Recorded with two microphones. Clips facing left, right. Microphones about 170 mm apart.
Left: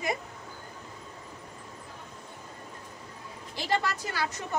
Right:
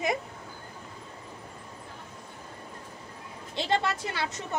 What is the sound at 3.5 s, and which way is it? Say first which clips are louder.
Speech: right 2 dB; 25° right (ahead or behind).